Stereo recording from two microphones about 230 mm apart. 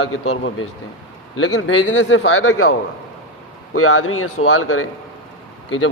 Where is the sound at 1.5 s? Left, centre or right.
Left.